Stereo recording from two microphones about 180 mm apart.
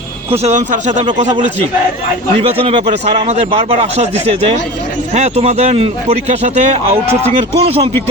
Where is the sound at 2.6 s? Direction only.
30° right (ahead or behind).